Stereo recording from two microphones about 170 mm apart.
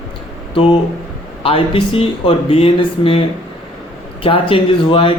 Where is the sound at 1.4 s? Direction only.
35° left (ahead or behind).